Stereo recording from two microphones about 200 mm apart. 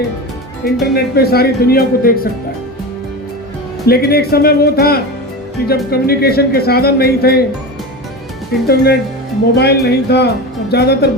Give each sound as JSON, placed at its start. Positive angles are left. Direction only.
{"t": 0.6, "sound": "speech", "side_deg": 50}
{"t": 3.8, "sound": "speech", "side_deg": 50}
{"t": 8.6, "sound": "speech", "side_deg": 50}